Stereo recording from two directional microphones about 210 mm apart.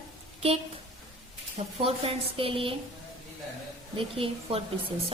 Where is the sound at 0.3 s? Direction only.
30° right (ahead or behind).